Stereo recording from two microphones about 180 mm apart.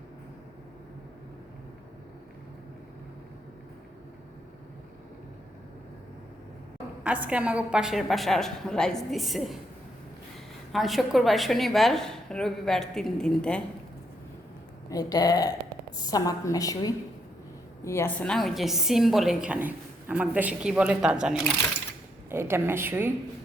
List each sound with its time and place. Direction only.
7.0 s a woman's voice: 5° right (ahead or behind)
10.7 s a woman's voice: centre (ahead or behind)
14.8 s a woman's voice: 20° left (ahead or behind); by 23.1 s 10° right (ahead or behind)